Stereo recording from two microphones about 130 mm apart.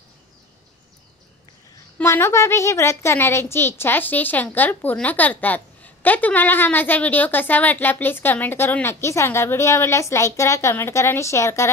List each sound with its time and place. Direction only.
2.0 s a woman's voice: 20° left (ahead or behind)